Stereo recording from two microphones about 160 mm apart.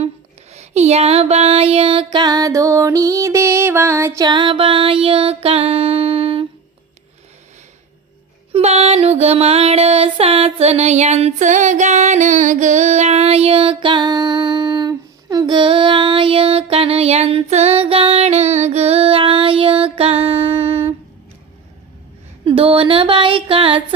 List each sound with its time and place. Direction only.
0.5 s music: 45° right (ahead or behind)
8.5 s music: 40° right (ahead or behind)
22.4 s speech: 35° right (ahead or behind)